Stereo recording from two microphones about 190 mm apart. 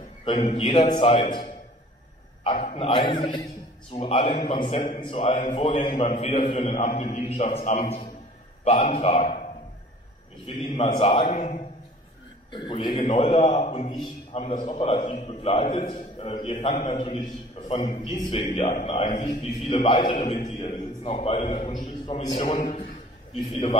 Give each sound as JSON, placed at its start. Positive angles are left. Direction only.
{"t": 0.2, "sound": "a man's voice", "side_deg": 30}
{"t": 2.6, "sound": "a man's voice", "side_deg": 30}
{"t": 6.0, "sound": "a man's voice", "side_deg": 40}
{"t": 10.4, "sound": "a man's voice", "side_deg": 25}
{"t": 12.4, "sound": "a man's voice", "side_deg": 25}
{"t": 19.0, "sound": "a man's voice", "side_deg": 40}